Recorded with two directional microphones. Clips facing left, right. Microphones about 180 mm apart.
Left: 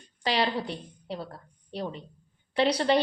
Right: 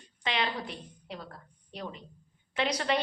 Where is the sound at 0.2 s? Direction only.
35° left (ahead or behind).